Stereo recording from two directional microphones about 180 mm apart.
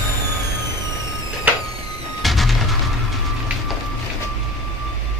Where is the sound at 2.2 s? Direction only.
Centre (ahead or behind).